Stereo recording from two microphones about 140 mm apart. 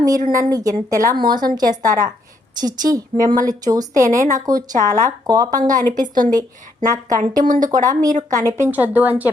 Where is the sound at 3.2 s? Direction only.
70° right (ahead or behind).